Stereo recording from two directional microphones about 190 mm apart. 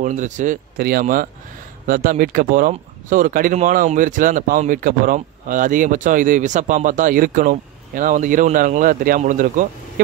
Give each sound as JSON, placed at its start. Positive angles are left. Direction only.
{"t": 0.0, "sound": "speech", "side_deg": -40}
{"t": 0.7, "sound": "speech", "side_deg": -50}